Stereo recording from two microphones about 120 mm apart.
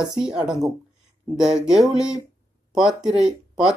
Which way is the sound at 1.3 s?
5° right (ahead or behind).